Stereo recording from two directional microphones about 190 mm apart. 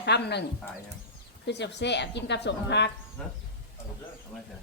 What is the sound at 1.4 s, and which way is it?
Speech, 65° left (ahead or behind).